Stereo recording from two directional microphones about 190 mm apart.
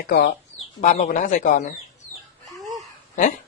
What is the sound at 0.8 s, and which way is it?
Speech, 35° left (ahead or behind).